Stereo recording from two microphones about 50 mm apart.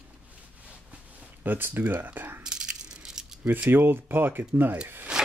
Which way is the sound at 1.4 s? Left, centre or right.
Right.